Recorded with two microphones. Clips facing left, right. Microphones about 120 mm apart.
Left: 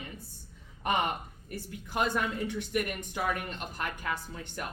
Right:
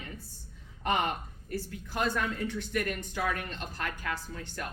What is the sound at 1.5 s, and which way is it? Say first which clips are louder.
A woman's voice: right 2 dB; 15° left (ahead or behind).